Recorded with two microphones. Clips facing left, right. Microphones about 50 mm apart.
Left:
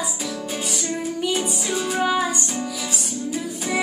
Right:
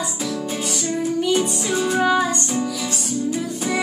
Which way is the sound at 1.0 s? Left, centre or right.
Centre.